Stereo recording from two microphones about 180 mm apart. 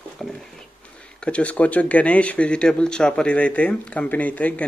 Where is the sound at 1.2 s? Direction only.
5° left (ahead or behind).